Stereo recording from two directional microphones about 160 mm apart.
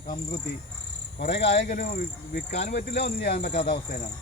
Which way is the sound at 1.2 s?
90° left.